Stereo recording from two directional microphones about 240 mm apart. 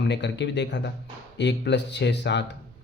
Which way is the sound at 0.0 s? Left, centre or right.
Left.